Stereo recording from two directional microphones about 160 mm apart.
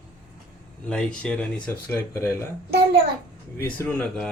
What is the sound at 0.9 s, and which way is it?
A man's voice, 5° left (ahead or behind).